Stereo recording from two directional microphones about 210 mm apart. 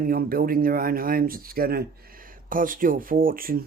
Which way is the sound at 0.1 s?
45° right (ahead or behind).